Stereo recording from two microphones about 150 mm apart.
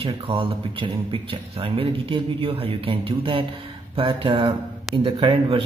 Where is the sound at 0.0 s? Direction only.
35° right (ahead or behind).